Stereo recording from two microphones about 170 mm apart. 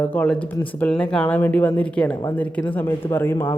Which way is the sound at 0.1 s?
10° left (ahead or behind).